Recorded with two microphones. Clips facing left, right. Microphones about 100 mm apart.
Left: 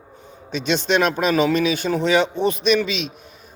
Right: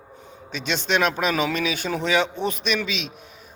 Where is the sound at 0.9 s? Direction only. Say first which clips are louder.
Left 3 dB; 5° right (ahead or behind).